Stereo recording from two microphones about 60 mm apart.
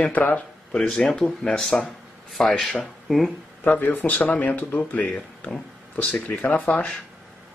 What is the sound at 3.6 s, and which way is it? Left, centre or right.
Speech, left.